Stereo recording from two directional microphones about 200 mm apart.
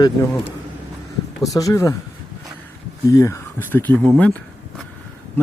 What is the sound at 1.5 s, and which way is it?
Speech, 15° left (ahead or behind).